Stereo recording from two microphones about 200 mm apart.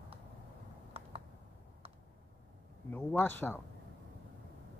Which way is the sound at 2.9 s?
5° left (ahead or behind).